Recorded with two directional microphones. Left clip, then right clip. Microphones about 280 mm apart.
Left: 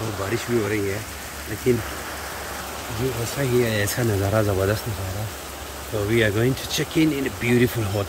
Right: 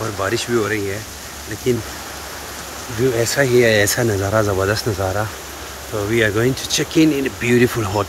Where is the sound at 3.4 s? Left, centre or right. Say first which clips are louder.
Right 8 dB; centre.